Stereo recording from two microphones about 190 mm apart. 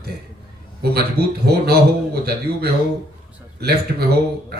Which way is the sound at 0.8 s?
55° right (ahead or behind).